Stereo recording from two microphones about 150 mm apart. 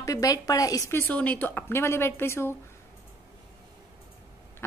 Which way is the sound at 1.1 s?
10° left (ahead or behind).